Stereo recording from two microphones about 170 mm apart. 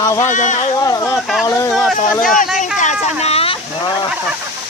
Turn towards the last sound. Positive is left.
turn(degrees=35)  # may be behind; listen again after turning